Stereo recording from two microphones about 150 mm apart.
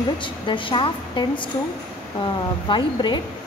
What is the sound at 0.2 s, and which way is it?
A woman's voice, 35° left (ahead or behind).